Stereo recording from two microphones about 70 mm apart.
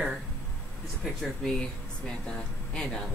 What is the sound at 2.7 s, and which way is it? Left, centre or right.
Speech, centre.